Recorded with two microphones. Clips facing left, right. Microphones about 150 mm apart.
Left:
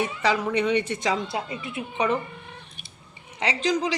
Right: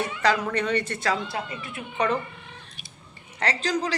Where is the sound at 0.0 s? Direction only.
10° left (ahead or behind).